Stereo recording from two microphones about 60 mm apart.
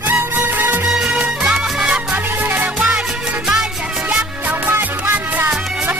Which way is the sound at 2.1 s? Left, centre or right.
Right.